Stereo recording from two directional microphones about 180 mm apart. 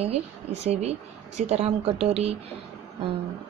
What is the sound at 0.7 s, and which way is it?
A woman's voice, 35° right (ahead or behind).